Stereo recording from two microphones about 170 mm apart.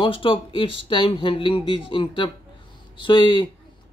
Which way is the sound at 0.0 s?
30° left (ahead or behind).